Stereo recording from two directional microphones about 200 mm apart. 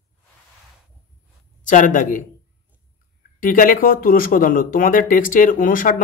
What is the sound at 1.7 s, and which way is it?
Speech, 40° left (ahead or behind).